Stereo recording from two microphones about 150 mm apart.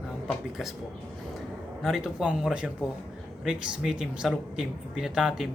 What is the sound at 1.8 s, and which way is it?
Speech, centre (ahead or behind).